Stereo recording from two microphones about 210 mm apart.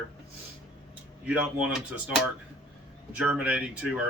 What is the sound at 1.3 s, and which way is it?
Speech, 5° right (ahead or behind).